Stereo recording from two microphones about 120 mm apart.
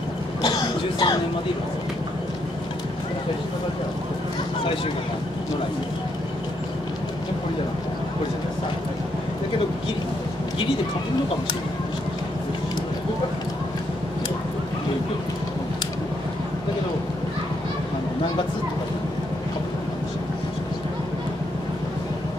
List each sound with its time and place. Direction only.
0.4 s cough: 35° left (ahead or behind)